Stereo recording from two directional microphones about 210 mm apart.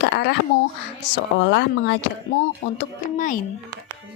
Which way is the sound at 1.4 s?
55° left (ahead or behind).